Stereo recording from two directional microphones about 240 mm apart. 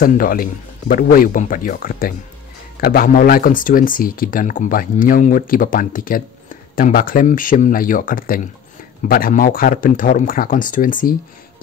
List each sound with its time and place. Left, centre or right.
0.0 s speech: left